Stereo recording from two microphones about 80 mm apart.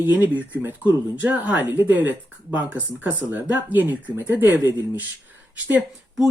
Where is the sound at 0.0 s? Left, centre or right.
Right.